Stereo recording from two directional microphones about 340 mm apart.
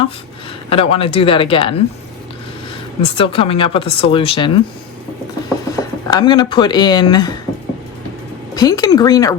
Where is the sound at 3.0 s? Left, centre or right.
Centre.